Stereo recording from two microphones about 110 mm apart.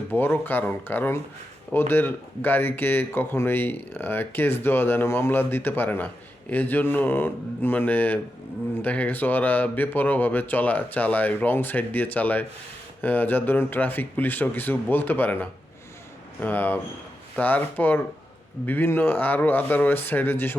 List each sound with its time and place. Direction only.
0.1 s speech: 20° left (ahead or behind)